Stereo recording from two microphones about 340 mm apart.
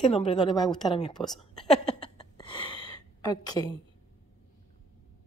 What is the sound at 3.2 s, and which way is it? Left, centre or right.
Speech, centre.